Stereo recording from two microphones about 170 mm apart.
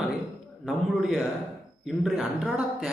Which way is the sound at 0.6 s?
Centre (ahead or behind).